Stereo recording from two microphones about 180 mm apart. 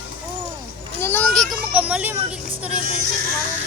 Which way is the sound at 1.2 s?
5° left (ahead or behind).